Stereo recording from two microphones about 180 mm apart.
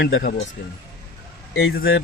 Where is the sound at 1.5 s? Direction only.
90° left.